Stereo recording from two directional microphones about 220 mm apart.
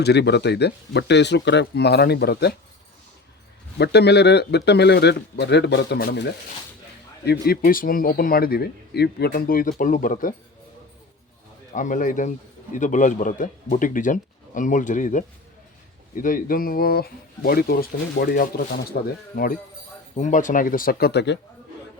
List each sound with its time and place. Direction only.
0.0 s speech: 50° left (ahead or behind)
3.8 s speech: 50° left (ahead or behind)
7.3 s speech: 45° left (ahead or behind)
11.7 s speech: 35° left (ahead or behind)